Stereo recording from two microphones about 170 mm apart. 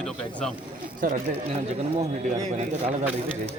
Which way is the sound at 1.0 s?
60° right (ahead or behind).